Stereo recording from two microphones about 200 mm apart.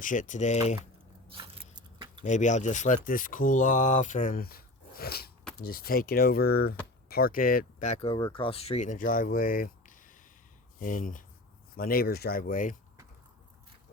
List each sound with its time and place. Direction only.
0.0 s speech: 40° left (ahead or behind)
1.3 s biting: 25° right (ahead or behind)
2.2 s speech: 35° left (ahead or behind)